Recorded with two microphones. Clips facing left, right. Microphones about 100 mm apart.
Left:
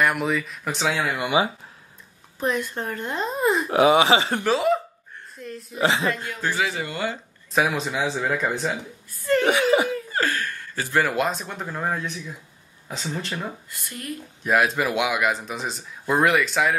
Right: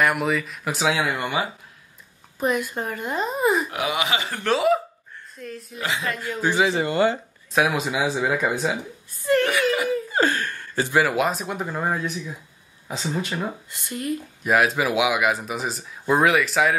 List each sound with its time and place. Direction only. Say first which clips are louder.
0.0 s speech: right 1 dB; centre (ahead or behind)
1.2 s speech: left 4 dB; 15° left (ahead or behind)
2.4 s speech: right 2 dB; 5° right (ahead or behind)
3.7 s speech: left 8 dB; 30° left (ahead or behind)
4.5 s speech: right 3 dB; centre (ahead or behind)
5.8 s speech: left 6 dB; 30° left (ahead or behind)
6.4 s speech: right 5 dB; 20° right (ahead or behind)
7.5 s speech: right 1 dB; 5° right (ahead or behind)
9.5 s laughter: left 3 dB; 25° left (ahead or behind)
9.8 s a sound: right 4 dB; 15° right (ahead or behind)
10.9 s speech: right 1 dB; 5° right (ahead or behind)
13.3 s speech: right 3 dB; 20° right (ahead or behind)
14.4 s speech: right 1 dB; centre (ahead or behind)